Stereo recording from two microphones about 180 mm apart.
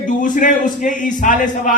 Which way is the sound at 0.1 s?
45° left (ahead or behind).